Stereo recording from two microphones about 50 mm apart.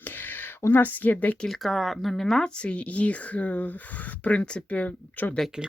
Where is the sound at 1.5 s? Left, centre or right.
Centre; by 5.2 s left.